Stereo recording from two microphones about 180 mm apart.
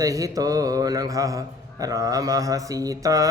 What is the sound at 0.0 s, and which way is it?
A man's voice, 20° right (ahead or behind).